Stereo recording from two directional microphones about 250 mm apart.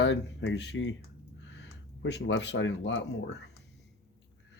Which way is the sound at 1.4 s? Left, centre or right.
Left.